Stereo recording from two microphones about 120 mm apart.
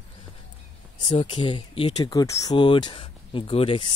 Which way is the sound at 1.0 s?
45° left (ahead or behind).